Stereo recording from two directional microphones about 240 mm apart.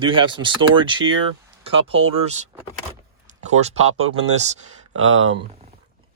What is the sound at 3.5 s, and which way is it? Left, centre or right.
Speech, right.